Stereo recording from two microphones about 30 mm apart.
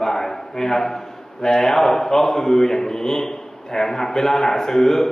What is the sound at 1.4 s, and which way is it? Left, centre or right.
A man's voice, centre.